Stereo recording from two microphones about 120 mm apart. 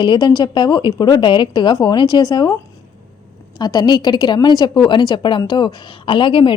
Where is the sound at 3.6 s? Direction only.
35° left (ahead or behind).